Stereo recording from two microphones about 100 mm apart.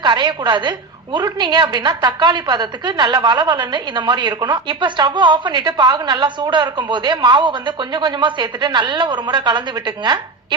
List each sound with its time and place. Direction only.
0.0 s a woman's voice: 45° right (ahead or behind)